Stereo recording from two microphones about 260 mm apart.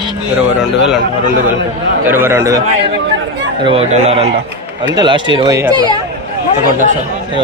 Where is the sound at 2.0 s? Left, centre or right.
Centre.